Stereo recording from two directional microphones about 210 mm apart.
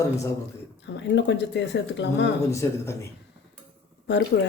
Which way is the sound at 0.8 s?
55° left (ahead or behind).